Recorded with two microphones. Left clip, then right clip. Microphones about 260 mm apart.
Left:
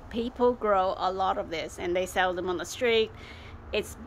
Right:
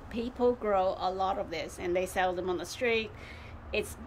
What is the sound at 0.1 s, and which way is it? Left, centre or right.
A woman's voice, centre.